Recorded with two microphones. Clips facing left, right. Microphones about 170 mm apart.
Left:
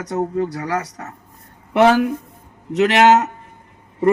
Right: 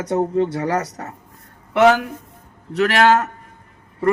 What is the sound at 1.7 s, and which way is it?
A man's voice, 25° left (ahead or behind).